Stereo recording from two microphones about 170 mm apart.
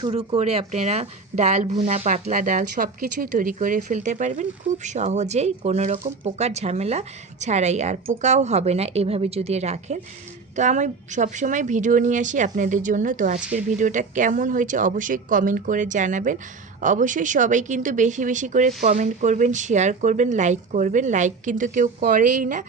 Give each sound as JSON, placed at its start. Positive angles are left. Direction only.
{"t": 0.1, "sound": "a woman's voice", "side_deg": -40}